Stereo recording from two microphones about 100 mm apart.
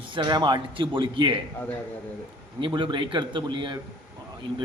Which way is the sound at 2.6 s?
50° right (ahead or behind).